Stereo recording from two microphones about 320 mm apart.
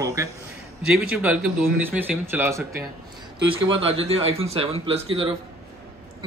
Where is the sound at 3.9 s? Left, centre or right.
Centre.